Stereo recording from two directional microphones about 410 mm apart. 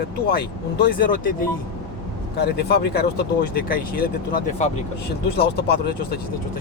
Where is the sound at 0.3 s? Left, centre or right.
Left.